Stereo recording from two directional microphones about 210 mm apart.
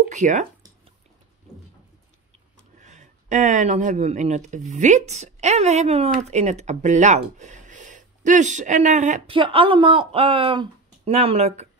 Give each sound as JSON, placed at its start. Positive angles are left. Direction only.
{"t": 0.1, "sound": "speech", "side_deg": -35}
{"t": 2.8, "sound": "speech", "side_deg": -35}
{"t": 9.4, "sound": "speech", "side_deg": -25}